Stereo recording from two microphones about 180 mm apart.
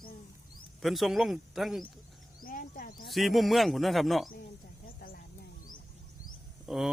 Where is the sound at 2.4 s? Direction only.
50° left (ahead or behind).